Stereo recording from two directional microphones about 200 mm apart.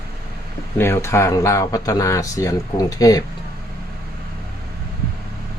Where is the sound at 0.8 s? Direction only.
15° left (ahead or behind).